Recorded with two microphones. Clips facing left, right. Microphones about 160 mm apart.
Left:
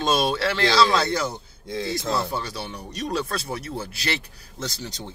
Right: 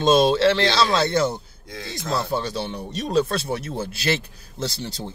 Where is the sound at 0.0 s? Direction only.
25° right (ahead or behind).